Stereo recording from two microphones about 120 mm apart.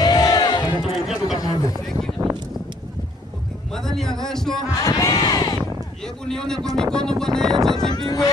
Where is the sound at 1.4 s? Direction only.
30° left (ahead or behind).